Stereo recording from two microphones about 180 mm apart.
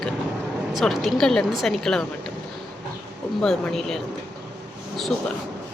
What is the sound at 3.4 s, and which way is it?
Speech, centre (ahead or behind).